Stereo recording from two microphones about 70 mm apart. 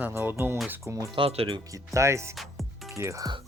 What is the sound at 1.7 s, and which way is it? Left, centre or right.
Speech, right.